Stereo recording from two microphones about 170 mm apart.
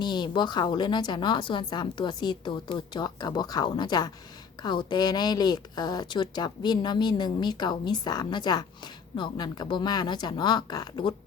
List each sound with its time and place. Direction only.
0.0 s speech: 25° left (ahead or behind)